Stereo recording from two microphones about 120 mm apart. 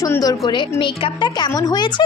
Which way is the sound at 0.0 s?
30° left (ahead or behind).